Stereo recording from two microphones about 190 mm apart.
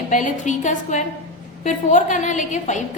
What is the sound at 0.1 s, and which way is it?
A woman's voice, 40° left (ahead or behind).